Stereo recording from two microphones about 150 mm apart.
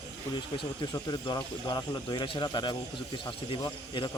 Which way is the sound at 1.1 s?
30° left (ahead or behind).